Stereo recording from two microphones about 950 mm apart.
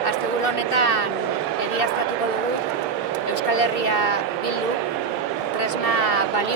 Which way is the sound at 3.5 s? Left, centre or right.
Left.